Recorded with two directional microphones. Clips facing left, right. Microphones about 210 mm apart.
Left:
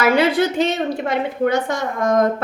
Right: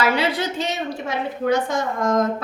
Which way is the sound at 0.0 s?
50° left (ahead or behind).